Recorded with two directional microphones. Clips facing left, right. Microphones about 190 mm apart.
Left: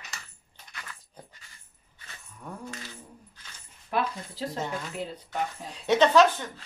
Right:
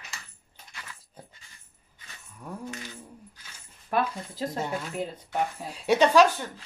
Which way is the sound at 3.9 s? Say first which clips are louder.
Right 2 dB; 50° right (ahead or behind).